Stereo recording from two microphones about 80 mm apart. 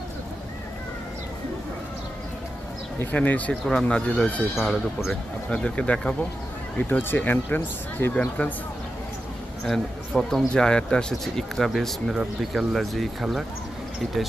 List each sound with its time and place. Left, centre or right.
3.0 s speech: left
5.5 s speech: centre
9.6 s speech: centre